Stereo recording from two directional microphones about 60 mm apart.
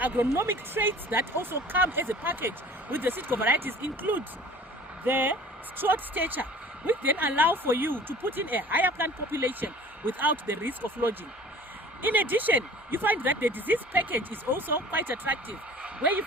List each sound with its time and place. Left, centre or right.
0.0 s speech: right